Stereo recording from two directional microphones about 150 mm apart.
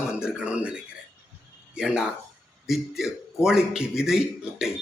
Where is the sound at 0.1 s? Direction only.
5° right (ahead or behind).